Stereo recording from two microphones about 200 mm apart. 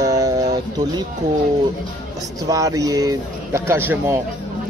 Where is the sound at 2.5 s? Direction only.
15° right (ahead or behind).